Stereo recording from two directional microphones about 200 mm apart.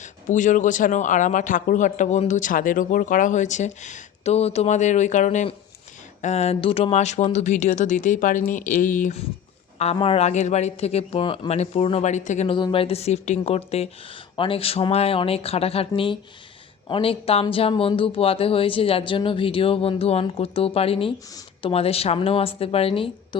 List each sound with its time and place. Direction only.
0.0 s a man's voice: 40° left (ahead or behind)
12.5 s speech: 25° left (ahead or behind)